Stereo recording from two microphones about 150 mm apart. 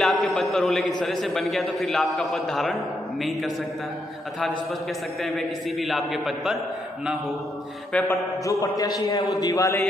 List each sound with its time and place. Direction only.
0.0 s a man's voice: centre (ahead or behind)
5.2 s a man's voice: centre (ahead or behind)
8.1 s a sound: 20° left (ahead or behind)